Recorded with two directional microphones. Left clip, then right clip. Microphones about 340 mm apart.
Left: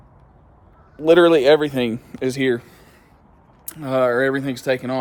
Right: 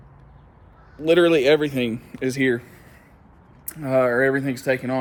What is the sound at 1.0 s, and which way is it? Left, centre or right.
Speech, centre.